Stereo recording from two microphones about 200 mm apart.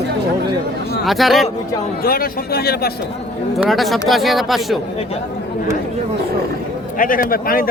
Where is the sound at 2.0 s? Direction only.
50° left (ahead or behind).